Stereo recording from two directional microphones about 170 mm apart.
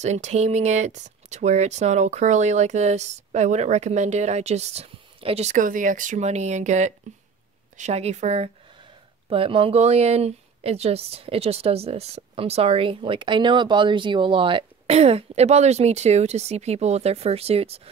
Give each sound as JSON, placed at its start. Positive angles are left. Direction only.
{"t": 0.0, "sound": "speech", "side_deg": -40}